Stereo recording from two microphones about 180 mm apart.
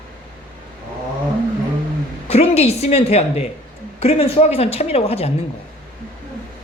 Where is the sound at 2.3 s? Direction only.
35° left (ahead or behind).